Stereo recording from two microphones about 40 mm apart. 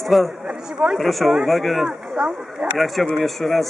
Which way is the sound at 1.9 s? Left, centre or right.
Centre.